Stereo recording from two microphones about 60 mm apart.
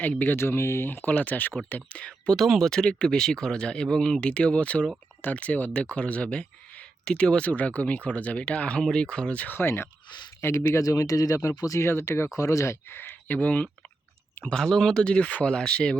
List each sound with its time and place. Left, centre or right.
0.0 s speech: left
0.3 s speech: left; by 2.3 s centre
2.3 s speech: centre; by 9.6 s left
9.6 s speech: left
10.4 s speech: left
11.8 s speech: left
12.4 s speech: left
12.9 s speech: left
14.5 s speech: centre